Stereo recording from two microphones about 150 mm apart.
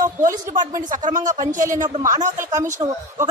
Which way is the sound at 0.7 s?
60° right (ahead or behind).